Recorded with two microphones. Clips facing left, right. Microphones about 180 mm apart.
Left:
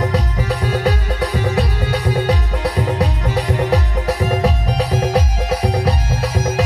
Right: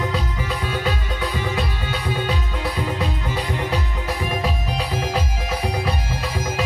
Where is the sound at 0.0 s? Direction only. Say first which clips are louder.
Left 5 dB; 40° left (ahead or behind).